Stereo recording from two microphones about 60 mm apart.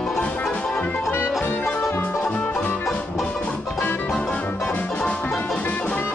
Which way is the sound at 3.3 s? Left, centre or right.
Centre.